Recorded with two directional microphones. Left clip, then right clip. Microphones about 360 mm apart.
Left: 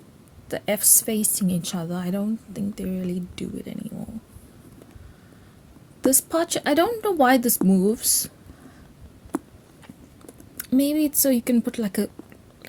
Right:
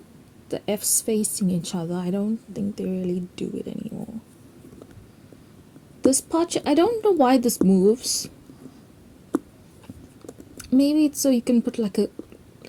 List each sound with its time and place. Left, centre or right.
0.5 s a woman's voice: left
6.1 s a woman's voice: left
10.6 s a sound: left
11.1 s a woman's voice: left